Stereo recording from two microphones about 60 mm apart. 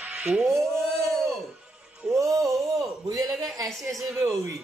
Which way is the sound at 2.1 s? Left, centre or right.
Right.